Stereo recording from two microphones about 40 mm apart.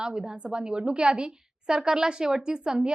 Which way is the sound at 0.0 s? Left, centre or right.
Centre.